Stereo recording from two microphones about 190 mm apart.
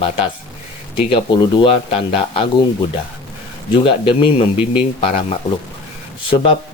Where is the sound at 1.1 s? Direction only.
25° left (ahead or behind).